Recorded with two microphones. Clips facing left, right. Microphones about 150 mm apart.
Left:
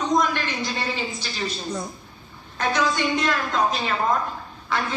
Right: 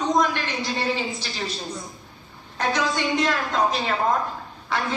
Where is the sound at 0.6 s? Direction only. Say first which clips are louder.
Right 3 dB; 20° right (ahead or behind).